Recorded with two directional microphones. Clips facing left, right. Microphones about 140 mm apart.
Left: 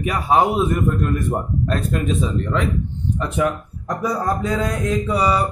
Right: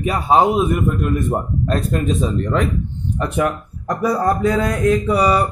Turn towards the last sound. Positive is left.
turn(degrees=-60)  # may be behind; listen again after turning